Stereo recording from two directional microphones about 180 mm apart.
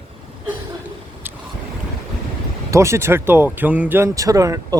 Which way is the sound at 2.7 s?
15° right (ahead or behind).